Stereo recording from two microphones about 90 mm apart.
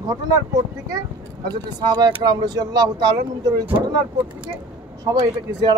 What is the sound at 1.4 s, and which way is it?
A man's voice, 50° right (ahead or behind).